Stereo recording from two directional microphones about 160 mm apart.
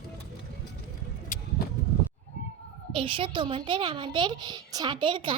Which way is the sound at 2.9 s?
35° right (ahead or behind).